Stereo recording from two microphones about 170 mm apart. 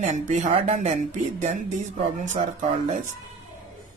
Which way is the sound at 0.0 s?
45° right (ahead or behind).